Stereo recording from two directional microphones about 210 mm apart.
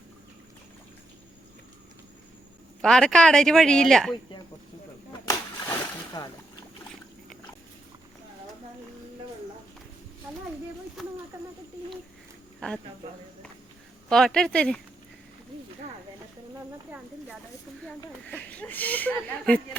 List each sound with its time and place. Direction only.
2.8 s speech: 5° left (ahead or behind)
5.2 s a sound: 15° left (ahead or behind)
6.2 s boat: 20° left (ahead or behind)
12.5 s a sound: centre (ahead or behind)
14.1 s speech: centre (ahead or behind)
18.3 s speech: 5° left (ahead or behind)